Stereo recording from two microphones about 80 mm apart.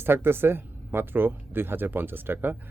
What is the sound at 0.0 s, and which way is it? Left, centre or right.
Speech, right.